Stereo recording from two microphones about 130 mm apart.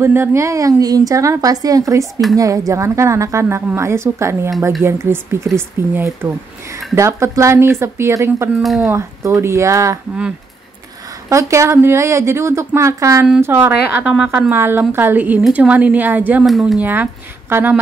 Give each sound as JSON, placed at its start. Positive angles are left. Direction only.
{"t": 0.0, "sound": "a woman's voice", "side_deg": -20}
{"t": 8.5, "sound": "speech", "side_deg": 0}
{"t": 8.8, "sound": "a woman's voice", "side_deg": -25}
{"t": 11.2, "sound": "a woman's voice", "side_deg": -25}
{"t": 14.5, "sound": "a woman's voice", "side_deg": -20}
{"t": 16.4, "sound": "speech", "side_deg": 0}
{"t": 16.8, "sound": "speech", "side_deg": -15}